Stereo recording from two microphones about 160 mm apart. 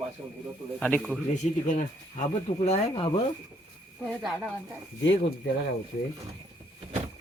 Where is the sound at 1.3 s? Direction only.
50° left (ahead or behind); by 3.2 s 35° left (ahead or behind).